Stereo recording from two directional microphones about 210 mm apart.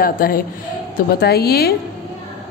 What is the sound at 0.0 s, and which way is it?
A woman's voice, 45° left (ahead or behind).